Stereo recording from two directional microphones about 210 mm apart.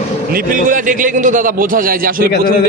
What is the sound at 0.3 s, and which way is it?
A man's voice, 40° right (ahead or behind).